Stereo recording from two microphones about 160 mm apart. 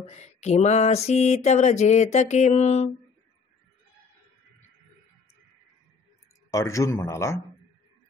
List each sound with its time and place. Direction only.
0.1 s mantra: 45° left (ahead or behind)
6.5 s a man's voice: 20° left (ahead or behind)